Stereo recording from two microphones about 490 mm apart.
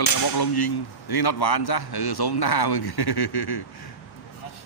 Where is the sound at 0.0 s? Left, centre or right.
Left.